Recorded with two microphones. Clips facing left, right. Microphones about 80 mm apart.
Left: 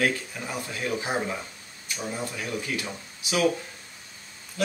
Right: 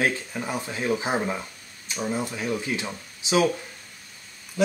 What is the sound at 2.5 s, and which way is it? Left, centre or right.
Speech, right.